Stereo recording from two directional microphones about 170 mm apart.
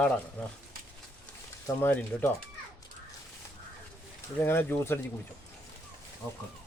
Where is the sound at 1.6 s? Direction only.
10° left (ahead or behind).